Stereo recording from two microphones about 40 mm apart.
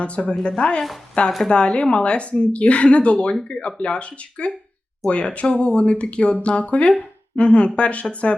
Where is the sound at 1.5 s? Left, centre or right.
Left.